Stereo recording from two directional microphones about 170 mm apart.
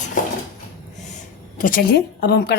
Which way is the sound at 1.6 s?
55° left (ahead or behind).